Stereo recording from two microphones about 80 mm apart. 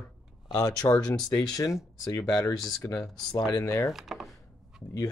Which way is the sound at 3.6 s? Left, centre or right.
Left.